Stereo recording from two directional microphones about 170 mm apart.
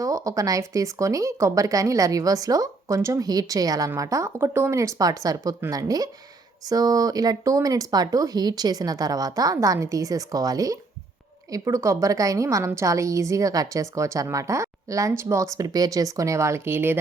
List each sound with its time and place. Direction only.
0.0 s speech: 20° right (ahead or behind)